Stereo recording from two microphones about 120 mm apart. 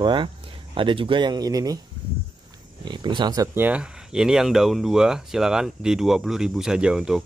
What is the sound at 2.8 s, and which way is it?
Speech, 40° right (ahead or behind).